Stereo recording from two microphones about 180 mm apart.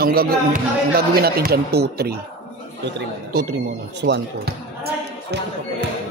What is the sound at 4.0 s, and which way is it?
Speech, 70° right (ahead or behind).